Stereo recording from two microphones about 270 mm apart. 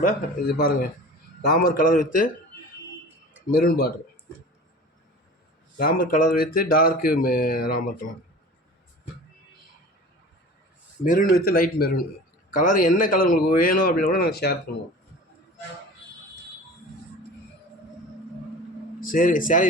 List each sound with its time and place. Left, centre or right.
0.0 s speech: left
3.5 s speech: left
5.7 s speech: left
11.0 s speech: left
18.9 s speech: left